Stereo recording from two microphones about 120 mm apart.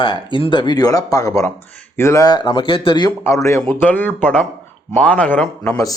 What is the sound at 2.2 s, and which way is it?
Speech, 35° left (ahead or behind).